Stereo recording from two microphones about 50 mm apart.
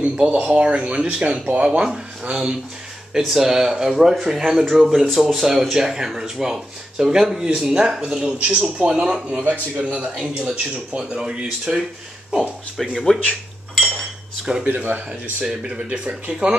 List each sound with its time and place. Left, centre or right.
0.0 s speech: right
3.1 s speech: centre
9.4 s speech: right
10.1 s speech: centre
10.5 s speech: right
13.1 s speech: centre
14.4 s speech: centre
14.7 s speech: right
15.7 s speech: centre